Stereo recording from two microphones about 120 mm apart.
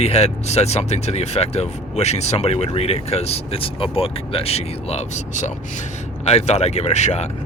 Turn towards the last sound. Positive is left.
turn(degrees=70)  # may be behind; listen again after turning